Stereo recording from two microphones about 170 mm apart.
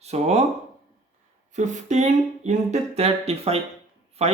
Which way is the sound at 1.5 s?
45° right (ahead or behind).